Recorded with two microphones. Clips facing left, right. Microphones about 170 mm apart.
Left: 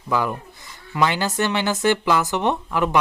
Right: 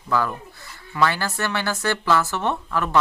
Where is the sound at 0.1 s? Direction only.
15° left (ahead or behind).